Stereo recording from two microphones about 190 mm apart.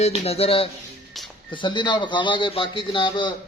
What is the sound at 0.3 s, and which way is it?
A man's voice, 30° left (ahead or behind).